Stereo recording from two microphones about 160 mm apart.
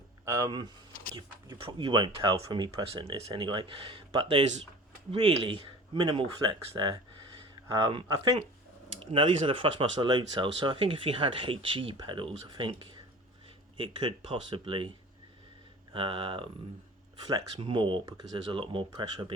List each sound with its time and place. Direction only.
0.3 s speech: 20° right (ahead or behind)
15.9 s speech: 30° right (ahead or behind)